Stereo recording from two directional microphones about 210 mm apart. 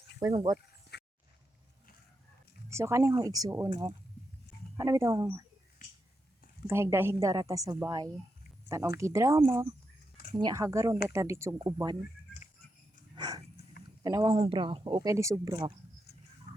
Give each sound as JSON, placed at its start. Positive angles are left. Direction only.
{"t": 0.2, "sound": "a woman's voice", "side_deg": -15}
{"t": 0.9, "sound": "a sound", "side_deg": 50}
{"t": 2.7, "sound": "a woman's voice", "side_deg": -15}
{"t": 4.8, "sound": "a woman's voice", "side_deg": -15}
{"t": 6.7, "sound": "a woman's voice", "side_deg": -10}
{"t": 13.1, "sound": "a sound", "side_deg": -20}
{"t": 14.0, "sound": "speech", "side_deg": -15}